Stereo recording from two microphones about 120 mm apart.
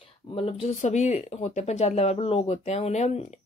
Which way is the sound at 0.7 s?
90° left.